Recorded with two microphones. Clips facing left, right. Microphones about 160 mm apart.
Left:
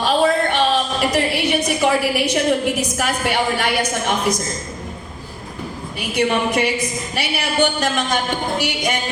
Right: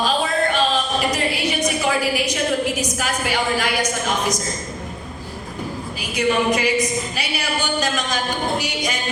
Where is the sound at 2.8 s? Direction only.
65° left (ahead or behind).